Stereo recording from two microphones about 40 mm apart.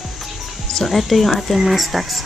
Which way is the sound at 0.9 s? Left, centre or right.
Centre.